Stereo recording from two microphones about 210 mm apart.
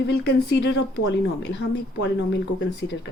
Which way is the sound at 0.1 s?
50° left (ahead or behind).